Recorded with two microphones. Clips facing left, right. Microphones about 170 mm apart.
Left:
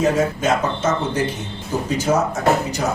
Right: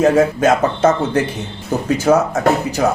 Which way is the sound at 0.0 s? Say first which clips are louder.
Right 6 dB; 65° right (ahead or behind).